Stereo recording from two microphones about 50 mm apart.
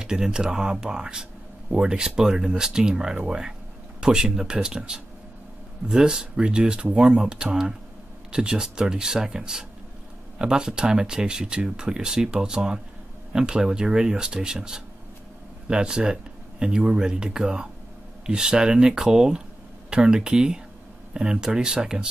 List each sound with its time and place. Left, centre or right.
0.0 s speech: centre